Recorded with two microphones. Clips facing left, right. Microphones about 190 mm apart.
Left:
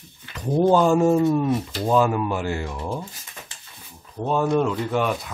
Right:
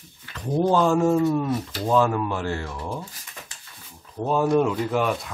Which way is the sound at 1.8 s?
10° left (ahead or behind).